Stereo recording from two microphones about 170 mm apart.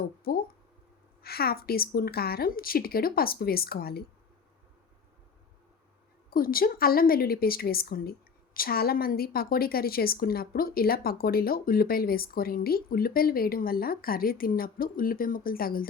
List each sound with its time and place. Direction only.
0.3 s a woman's voice: 65° left (ahead or behind)
6.3 s a woman's voice: 60° left (ahead or behind)